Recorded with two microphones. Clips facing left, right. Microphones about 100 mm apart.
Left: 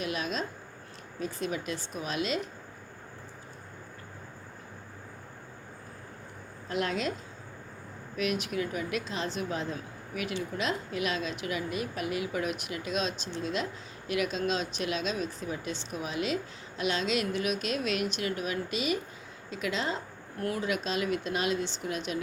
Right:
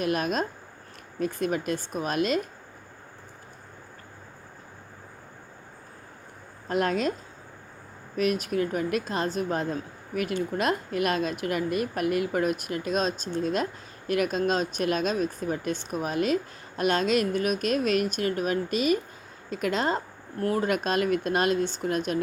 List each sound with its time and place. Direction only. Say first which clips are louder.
0.0 s speech: right 6 dB; 50° right (ahead or behind)
6.7 s speech: right 5 dB; 45° right (ahead or behind)
8.1 s speech: right 5 dB; 45° right (ahead or behind)